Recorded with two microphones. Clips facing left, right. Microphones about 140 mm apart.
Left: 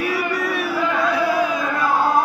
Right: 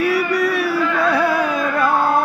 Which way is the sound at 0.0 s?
70° right (ahead or behind).